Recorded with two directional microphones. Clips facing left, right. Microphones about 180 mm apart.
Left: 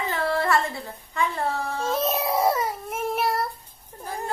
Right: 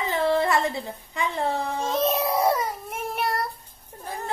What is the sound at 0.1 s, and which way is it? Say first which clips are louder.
Speech: right 2 dB; 20° right (ahead or behind).